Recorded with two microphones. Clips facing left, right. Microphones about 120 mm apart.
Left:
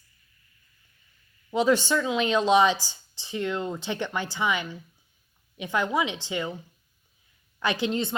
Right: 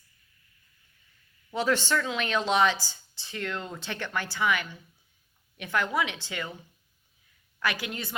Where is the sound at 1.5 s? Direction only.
15° left (ahead or behind).